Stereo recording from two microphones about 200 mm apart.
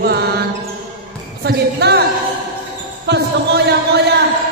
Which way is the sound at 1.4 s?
55° right (ahead or behind).